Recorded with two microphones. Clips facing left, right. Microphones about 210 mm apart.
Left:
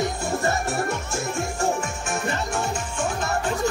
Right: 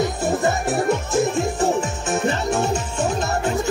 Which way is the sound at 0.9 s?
20° right (ahead or behind).